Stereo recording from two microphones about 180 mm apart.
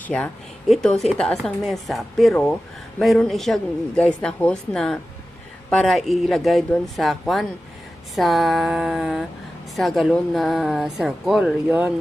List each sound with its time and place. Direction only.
0.1 s a woman's voice: 5° left (ahead or behind)